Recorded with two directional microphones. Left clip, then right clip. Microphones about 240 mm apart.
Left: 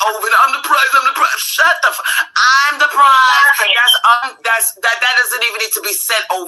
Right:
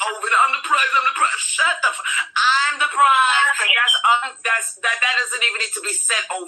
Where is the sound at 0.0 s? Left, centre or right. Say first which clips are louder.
Left 6 dB; left.